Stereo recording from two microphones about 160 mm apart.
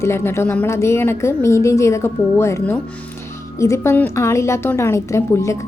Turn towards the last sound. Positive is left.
turn(degrees=15)  # may be behind; listen again after turning